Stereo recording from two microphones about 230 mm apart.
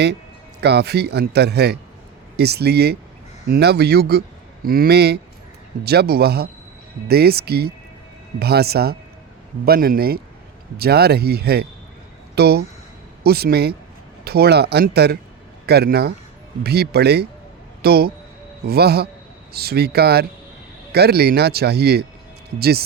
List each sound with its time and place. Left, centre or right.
0.6 s a man's voice: right